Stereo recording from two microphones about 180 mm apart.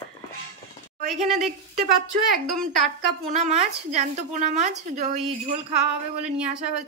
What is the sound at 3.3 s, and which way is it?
A woman's voice, 40° right (ahead or behind).